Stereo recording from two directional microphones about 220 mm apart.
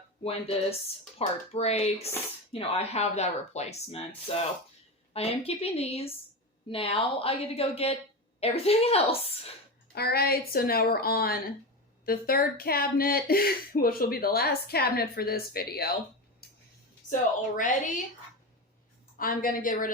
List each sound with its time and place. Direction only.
0.3 s speech: 25° left (ahead or behind)
9.9 s speech: 45° left (ahead or behind)
17.6 s a woman's voice: 35° left (ahead or behind)
19.1 s a woman's voice: 40° left (ahead or behind)